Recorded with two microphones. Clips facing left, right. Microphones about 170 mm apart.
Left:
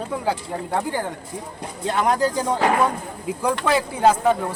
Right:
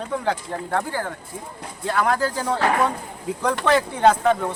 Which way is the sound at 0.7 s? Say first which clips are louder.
Left 1 dB; 15° left (ahead or behind).